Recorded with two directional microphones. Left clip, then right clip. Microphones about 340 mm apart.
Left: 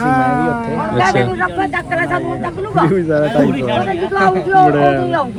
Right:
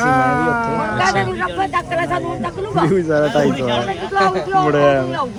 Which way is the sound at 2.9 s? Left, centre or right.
Centre.